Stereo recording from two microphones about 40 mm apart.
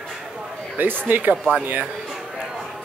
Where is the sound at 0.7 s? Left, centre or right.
Right.